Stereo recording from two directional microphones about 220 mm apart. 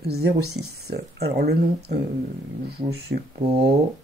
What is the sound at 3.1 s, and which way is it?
Speech, 50° right (ahead or behind).